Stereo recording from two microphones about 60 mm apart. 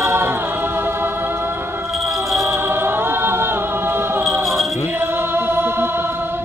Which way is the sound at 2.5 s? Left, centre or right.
Right.